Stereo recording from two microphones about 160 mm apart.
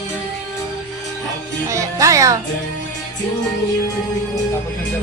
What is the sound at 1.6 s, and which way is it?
Speech, 20° right (ahead or behind).